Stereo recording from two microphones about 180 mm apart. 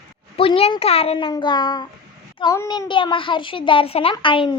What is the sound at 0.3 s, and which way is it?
A child's voice, 30° left (ahead or behind).